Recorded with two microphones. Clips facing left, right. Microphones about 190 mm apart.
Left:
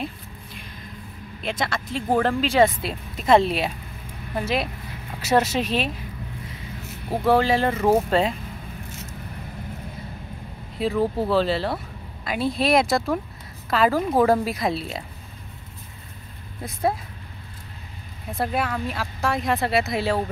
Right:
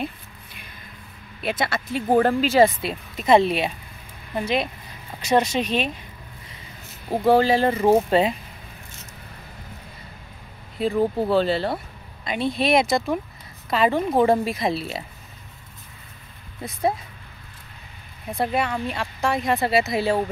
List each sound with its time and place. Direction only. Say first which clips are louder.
0.0 s music: right 1 dB; centre (ahead or behind)
1.4 s speech: right 2 dB; 5° right (ahead or behind)
5.2 s speech: even; 5° left (ahead or behind)
7.1 s speech: right 2 dB; centre (ahead or behind)
10.8 s speech: right 1 dB; centre (ahead or behind)
16.6 s speech: even; centre (ahead or behind)
18.3 s speech: right 2 dB; centre (ahead or behind)